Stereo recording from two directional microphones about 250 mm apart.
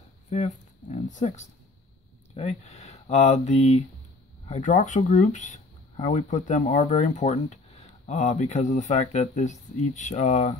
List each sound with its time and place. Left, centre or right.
0.3 s speech: left